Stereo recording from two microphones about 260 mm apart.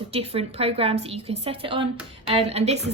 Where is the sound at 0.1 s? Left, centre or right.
Right.